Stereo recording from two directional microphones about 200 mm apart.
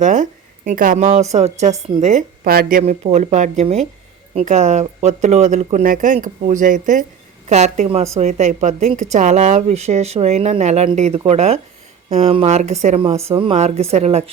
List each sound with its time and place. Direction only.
0.0 s a woman's voice: 40° right (ahead or behind)